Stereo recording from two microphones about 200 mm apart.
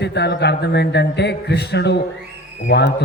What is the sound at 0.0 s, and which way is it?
A man's voice, 60° left (ahead or behind).